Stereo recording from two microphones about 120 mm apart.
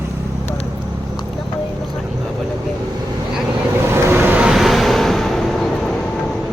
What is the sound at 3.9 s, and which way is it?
Vehicle, 20° right (ahead or behind).